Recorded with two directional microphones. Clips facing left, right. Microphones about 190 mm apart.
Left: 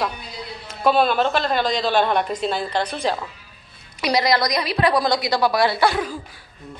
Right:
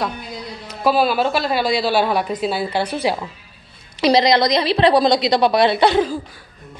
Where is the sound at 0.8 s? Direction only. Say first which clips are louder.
Right 1 dB; 5° right (ahead or behind).